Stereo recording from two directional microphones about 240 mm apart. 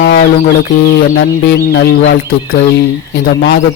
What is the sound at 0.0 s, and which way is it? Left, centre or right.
Bird, left.